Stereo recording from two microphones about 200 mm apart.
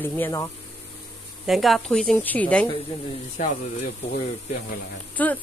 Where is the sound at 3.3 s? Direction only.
45° left (ahead or behind).